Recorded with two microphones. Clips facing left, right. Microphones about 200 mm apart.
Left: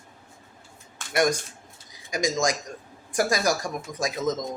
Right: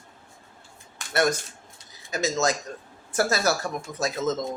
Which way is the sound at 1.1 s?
15° left (ahead or behind).